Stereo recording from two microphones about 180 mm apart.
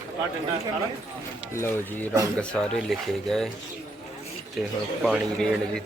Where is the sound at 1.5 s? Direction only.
15° left (ahead or behind).